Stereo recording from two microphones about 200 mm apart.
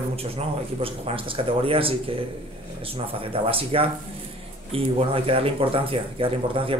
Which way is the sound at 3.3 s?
30° right (ahead or behind).